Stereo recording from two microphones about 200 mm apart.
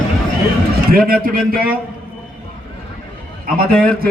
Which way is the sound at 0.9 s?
45° right (ahead or behind).